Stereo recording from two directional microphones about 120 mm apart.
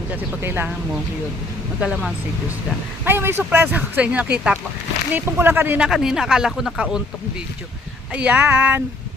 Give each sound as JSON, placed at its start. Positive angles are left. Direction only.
{"t": 0.1, "sound": "speech", "side_deg": -15}
{"t": 1.8, "sound": "speech", "side_deg": -5}
{"t": 3.0, "sound": "speech", "side_deg": -20}
{"t": 5.9, "sound": "speech", "side_deg": -5}
{"t": 8.1, "sound": "speech", "side_deg": -10}